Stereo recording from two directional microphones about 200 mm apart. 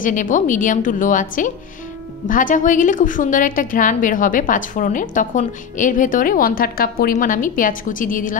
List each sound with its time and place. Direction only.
0.0 s a woman's voice: 40° left (ahead or behind)